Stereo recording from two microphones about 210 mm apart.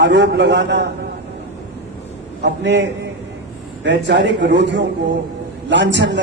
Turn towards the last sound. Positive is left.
turn(degrees=-55)  # may be behind; listen again after turning